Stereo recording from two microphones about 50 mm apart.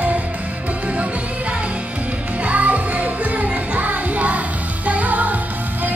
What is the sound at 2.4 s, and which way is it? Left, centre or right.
Music, right.